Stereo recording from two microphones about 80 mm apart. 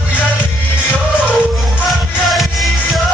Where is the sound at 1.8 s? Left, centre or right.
Centre.